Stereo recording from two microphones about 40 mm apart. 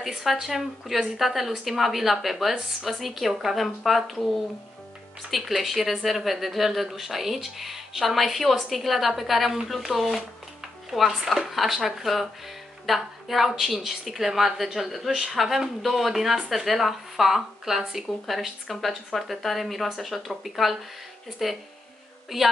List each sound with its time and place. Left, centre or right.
0.2 s a woman's voice: centre
5.6 s a woman's voice: centre
15.0 s speech: centre
15.3 s a woman's voice: centre